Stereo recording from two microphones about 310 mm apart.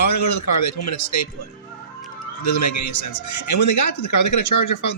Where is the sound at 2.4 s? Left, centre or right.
Left.